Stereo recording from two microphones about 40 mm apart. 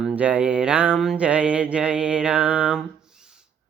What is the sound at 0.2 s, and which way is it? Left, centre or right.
Music, right.